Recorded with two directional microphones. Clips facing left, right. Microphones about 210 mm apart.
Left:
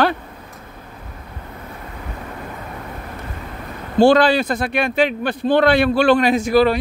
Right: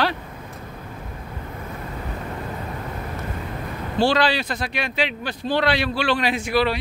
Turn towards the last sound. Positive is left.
turn(degrees=40)  # may be behind; listen again after turning